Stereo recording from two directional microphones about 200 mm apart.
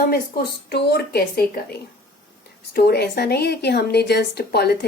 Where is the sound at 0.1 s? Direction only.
50° left (ahead or behind).